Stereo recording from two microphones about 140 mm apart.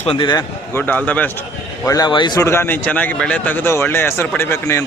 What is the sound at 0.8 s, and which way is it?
Speech, 10° left (ahead or behind).